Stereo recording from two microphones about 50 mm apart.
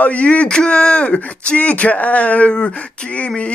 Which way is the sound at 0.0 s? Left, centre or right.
Left.